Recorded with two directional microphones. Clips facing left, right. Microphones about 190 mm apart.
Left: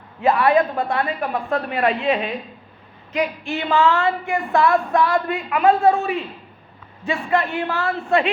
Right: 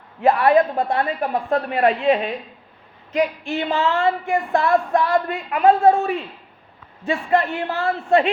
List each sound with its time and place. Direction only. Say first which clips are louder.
0.2 s speech: right 1 dB; 50° right (ahead or behind)
3.7 s a woman's voice: left 5 dB; 30° right (ahead or behind)
4.0 s a man's voice: right 2 dB; 50° right (ahead or behind)